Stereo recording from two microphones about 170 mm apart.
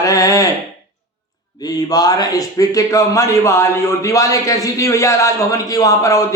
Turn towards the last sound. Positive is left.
turn(degrees=20)  # may be behind; listen again after turning